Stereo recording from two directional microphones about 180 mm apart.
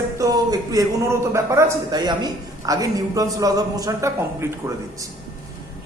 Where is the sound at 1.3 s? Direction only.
15° right (ahead or behind).